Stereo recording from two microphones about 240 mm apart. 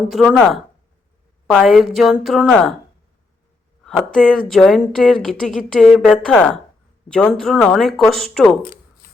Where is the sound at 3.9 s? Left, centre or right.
Centre.